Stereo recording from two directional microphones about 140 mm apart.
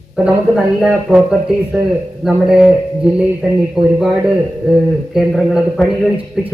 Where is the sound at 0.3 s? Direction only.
5° right (ahead or behind).